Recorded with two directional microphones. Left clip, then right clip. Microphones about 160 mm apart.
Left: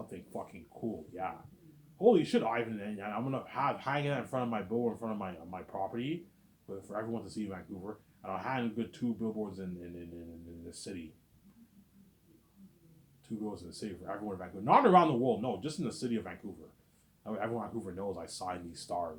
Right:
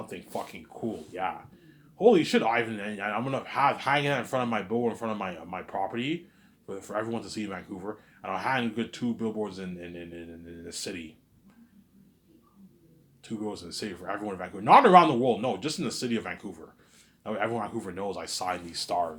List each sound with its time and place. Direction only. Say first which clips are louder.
0.1 s a man's voice: right 9 dB; 35° right (ahead or behind)
10.7 s a man's voice: right 10 dB; 30° right (ahead or behind)
13.4 s a man's voice: right 7 dB; 30° right (ahead or behind)